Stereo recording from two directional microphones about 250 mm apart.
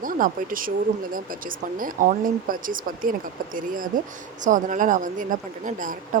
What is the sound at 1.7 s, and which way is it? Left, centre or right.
A woman's voice, right.